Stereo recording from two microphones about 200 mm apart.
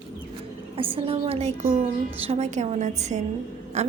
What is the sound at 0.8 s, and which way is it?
A woman's voice, 25° right (ahead or behind).